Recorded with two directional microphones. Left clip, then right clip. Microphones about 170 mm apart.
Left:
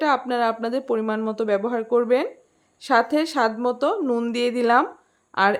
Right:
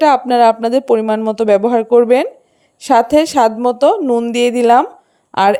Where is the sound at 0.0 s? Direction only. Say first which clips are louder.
Right 11 dB; 40° right (ahead or behind).